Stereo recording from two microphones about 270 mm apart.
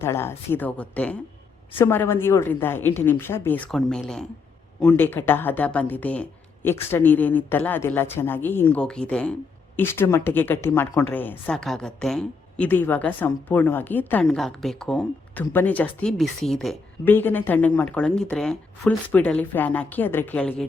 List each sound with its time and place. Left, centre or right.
0.0 s a woman's voice: centre